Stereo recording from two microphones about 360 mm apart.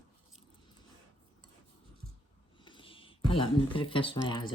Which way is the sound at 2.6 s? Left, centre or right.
Centre.